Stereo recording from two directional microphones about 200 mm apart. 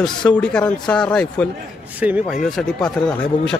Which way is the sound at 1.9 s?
5° right (ahead or behind).